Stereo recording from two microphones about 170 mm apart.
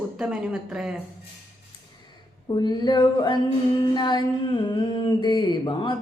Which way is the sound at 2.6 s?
25° left (ahead or behind).